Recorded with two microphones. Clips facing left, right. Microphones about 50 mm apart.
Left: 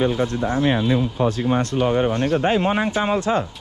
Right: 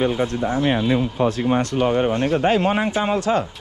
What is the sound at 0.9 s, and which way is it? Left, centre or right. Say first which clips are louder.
Speech: right 1 dB; right.